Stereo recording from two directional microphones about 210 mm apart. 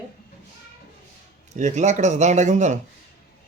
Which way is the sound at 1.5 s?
35° right (ahead or behind).